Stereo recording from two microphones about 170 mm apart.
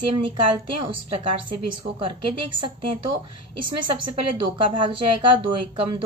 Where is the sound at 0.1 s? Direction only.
30° right (ahead or behind).